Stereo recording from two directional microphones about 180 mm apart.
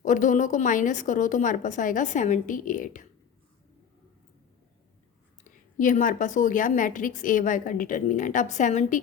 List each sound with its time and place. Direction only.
0.0 s a woman's voice: 45° left (ahead or behind)
5.8 s a woman's voice: 45° left (ahead or behind)